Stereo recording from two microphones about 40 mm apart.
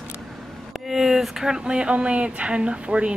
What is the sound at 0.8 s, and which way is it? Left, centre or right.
Speech, centre.